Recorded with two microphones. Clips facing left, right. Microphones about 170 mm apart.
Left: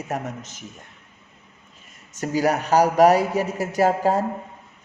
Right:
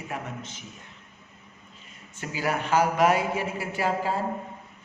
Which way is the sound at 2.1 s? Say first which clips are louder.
Left 8 dB; 40° left (ahead or behind).